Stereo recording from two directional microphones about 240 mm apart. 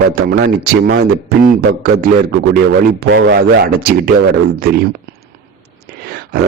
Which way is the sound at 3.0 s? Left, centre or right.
Right.